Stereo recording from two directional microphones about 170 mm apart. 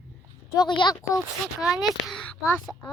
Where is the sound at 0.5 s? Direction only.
25° left (ahead or behind).